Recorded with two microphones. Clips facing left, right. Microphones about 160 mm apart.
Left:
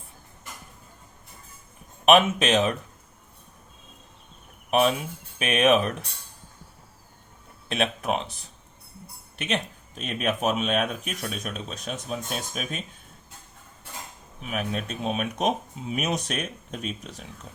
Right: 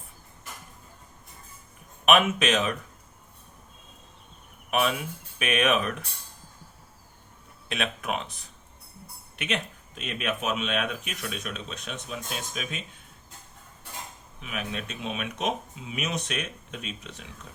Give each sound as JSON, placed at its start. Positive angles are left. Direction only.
{"t": 2.0, "sound": "speech", "side_deg": 30}
{"t": 4.7, "sound": "speech", "side_deg": 35}
{"t": 7.7, "sound": "speech", "side_deg": 35}
{"t": 9.4, "sound": "speech", "side_deg": 35}
{"t": 14.4, "sound": "speech", "side_deg": 40}